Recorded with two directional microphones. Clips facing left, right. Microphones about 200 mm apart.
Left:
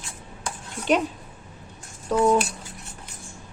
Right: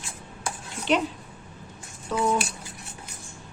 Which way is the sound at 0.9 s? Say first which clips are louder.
Left 2 dB; 45° left (ahead or behind).